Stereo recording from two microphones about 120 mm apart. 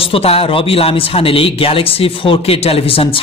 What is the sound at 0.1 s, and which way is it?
Speech, 55° left (ahead or behind).